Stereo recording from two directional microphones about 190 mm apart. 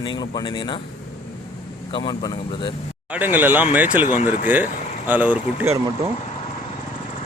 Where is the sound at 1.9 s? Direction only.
25° left (ahead or behind).